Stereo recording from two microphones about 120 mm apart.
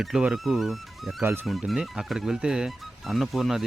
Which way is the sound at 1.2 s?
20° right (ahead or behind).